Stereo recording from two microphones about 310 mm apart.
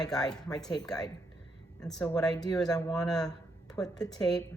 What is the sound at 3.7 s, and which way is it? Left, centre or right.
Speech, centre.